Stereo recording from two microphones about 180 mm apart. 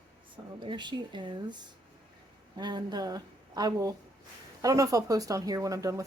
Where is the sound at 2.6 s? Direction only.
20° right (ahead or behind).